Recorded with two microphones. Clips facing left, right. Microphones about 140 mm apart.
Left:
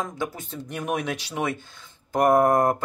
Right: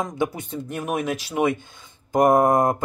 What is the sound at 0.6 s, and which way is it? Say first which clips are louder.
A woman's voice: right 2 dB; 5° right (ahead or behind).